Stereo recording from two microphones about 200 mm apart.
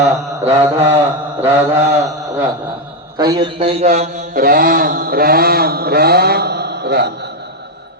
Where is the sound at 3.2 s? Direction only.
15° right (ahead or behind).